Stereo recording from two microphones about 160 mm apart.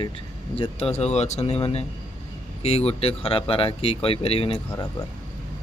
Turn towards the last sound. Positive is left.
turn(degrees=35)  # may be behind; listen again after turning